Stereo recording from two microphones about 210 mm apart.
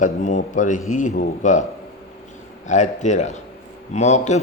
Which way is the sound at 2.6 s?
35° left (ahead or behind).